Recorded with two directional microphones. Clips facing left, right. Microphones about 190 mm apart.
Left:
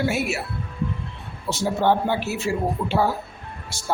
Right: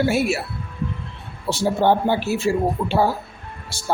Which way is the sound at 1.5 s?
30° right (ahead or behind).